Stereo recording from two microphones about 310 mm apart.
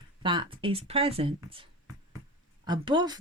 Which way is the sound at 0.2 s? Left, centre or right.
Centre.